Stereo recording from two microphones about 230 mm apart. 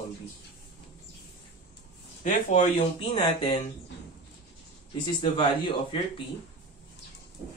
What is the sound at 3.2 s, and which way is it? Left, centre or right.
Speech, left.